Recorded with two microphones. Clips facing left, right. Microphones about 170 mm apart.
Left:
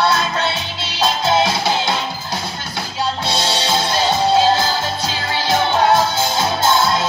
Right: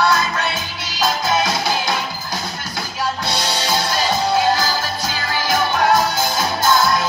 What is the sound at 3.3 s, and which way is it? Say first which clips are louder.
Music: left 2 dB; 25° left (ahead or behind).